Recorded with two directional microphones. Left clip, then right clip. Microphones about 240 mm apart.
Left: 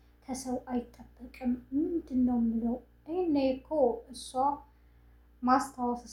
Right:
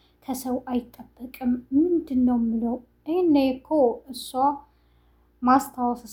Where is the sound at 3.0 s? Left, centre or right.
Right.